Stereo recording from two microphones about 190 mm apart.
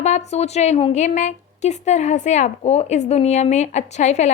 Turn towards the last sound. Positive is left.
turn(degrees=40)  # may be behind; listen again after turning